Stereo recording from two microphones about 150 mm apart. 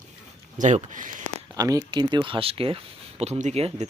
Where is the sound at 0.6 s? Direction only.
55° right (ahead or behind).